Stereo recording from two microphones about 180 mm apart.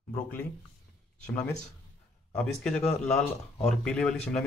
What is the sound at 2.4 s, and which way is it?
Speech, 5° left (ahead or behind).